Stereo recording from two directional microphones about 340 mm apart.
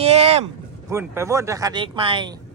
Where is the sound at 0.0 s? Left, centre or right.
Centre.